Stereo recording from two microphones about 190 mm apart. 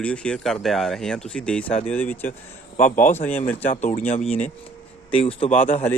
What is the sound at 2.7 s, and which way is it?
Speech, 40° left (ahead or behind).